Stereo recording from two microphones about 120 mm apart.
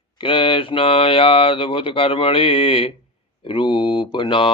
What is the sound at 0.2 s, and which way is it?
Speech, 45° left (ahead or behind).